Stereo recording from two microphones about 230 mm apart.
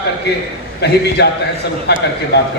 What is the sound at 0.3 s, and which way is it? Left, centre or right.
A man's voice, left.